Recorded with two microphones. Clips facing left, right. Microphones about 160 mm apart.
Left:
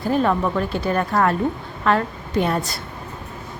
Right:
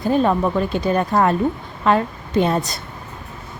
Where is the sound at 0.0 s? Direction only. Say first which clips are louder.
Right 2 dB; 20° right (ahead or behind).